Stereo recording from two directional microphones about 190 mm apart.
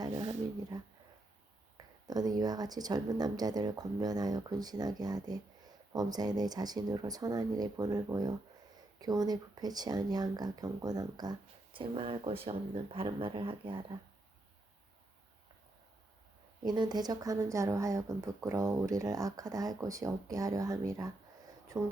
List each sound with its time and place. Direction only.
0.0 s a sound: 20° right (ahead or behind)
2.0 s speech: 20° right (ahead or behind)
16.6 s speech: 20° right (ahead or behind)